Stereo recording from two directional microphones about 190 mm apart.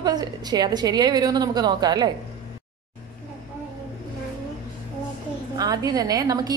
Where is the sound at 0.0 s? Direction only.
20° right (ahead or behind).